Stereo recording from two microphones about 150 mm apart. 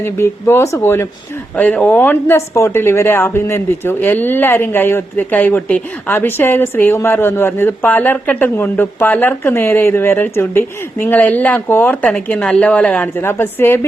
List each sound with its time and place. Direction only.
0.0 s speech: 15° left (ahead or behind)